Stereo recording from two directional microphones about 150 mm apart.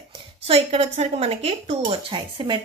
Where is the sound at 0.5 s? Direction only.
40° right (ahead or behind).